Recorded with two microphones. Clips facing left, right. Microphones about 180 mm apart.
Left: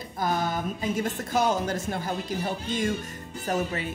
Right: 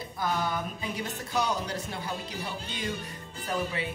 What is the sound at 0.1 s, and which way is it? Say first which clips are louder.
A woman's voice: left 3 dB; 45° left (ahead or behind).